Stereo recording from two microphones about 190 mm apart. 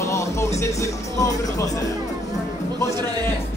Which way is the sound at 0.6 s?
15° left (ahead or behind).